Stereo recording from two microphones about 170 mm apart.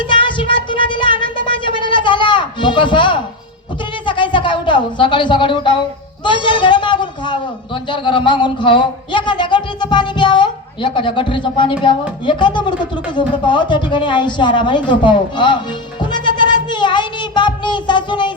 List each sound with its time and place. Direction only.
0.0 s a sound: 30° left (ahead or behind)
6.2 s a man's voice: 30° left (ahead or behind)
16.6 s music: 25° left (ahead or behind)